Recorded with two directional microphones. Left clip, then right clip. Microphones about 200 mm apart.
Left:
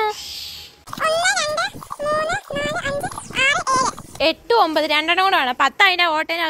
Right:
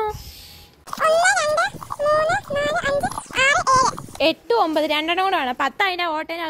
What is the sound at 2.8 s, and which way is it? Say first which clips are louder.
Clip-clop: right 3 dB; 30° right (ahead or behind).